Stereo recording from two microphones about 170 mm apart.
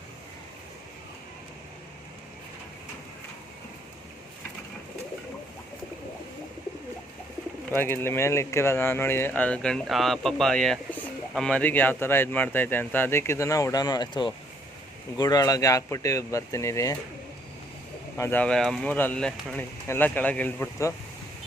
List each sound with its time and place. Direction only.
7.7 s speech: 15° left (ahead or behind)
18.2 s speech: 10° left (ahead or behind)